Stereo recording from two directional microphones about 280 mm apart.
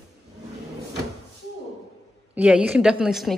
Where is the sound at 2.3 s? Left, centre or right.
Centre.